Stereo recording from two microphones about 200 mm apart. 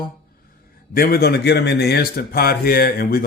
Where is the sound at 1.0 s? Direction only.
50° left (ahead or behind).